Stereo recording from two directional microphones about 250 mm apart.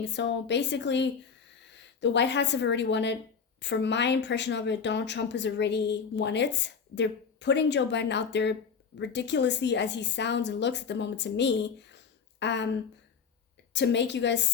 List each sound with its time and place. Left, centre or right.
0.0 s speech: left
13.7 s speech: left